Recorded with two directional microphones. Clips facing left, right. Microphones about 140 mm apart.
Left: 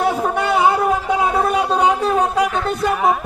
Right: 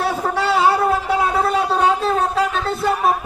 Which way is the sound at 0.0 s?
15° left (ahead or behind).